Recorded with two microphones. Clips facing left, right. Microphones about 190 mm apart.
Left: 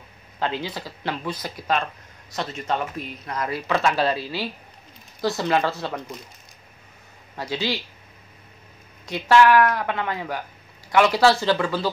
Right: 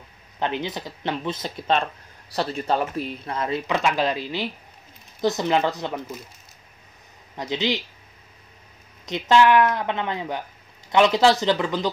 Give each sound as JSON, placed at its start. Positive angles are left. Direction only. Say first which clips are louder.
{"t": 0.4, "sound": "speech", "louder": "right 1 dB", "side_deg": -20}
{"t": 7.3, "sound": "speech", "louder": "right 2 dB", "side_deg": -20}
{"t": 9.0, "sound": "speech", "louder": "left 1 dB", "side_deg": -20}